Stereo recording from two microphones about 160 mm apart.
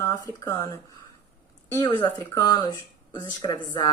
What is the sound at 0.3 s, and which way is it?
Speech, 15° left (ahead or behind).